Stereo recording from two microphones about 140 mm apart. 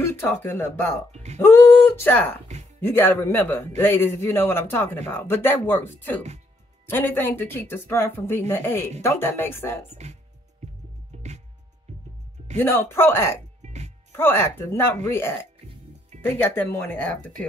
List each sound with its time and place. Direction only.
0.0 s a man's voice: 15° left (ahead or behind)
1.1 s speech: 55° right (ahead or behind)
1.4 s a man's voice: 15° left (ahead or behind)
9.8 s speech: 50° right (ahead or behind)
11.9 s music: 55° right (ahead or behind)
12.5 s a man's voice: 15° left (ahead or behind)
13.6 s music: 55° right (ahead or behind)
14.1 s a man's voice: 15° left (ahead or behind)
16.4 s a man's voice: 15° left (ahead or behind)